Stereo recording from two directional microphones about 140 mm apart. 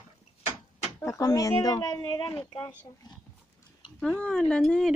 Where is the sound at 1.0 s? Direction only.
25° left (ahead or behind).